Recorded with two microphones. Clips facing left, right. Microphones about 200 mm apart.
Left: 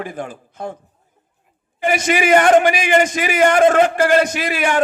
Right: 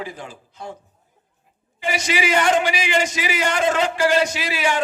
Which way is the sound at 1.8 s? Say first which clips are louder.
Left 6 dB; 50° left (ahead or behind).